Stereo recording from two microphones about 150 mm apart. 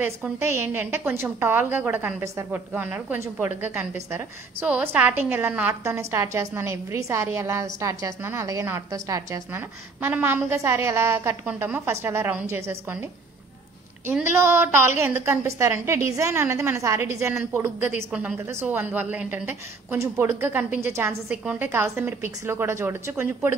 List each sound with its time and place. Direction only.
0.0 s a woman's voice: 15° right (ahead or behind)
17.3 s a woman's voice: 5° right (ahead or behind)